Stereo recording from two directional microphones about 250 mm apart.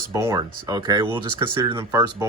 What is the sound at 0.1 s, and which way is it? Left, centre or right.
Speech, centre.